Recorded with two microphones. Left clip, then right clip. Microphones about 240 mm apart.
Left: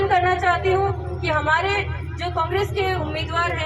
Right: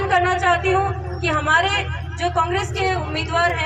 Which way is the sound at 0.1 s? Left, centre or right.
Right.